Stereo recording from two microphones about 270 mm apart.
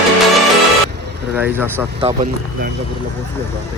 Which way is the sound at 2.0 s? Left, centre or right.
Right.